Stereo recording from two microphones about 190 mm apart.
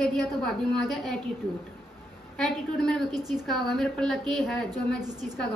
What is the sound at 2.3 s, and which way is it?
A woman's voice, centre (ahead or behind).